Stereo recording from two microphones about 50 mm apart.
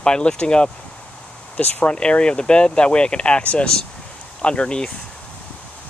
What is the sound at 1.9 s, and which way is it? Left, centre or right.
Speech, left.